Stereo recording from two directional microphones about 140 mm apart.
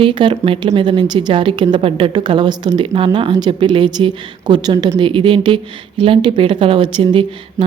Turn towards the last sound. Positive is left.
turn(degrees=-35)  # may be behind; listen again after turning